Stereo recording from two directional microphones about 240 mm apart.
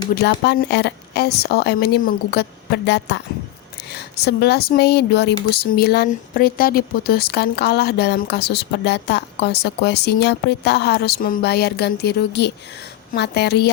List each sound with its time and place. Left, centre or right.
0.1 s speech: left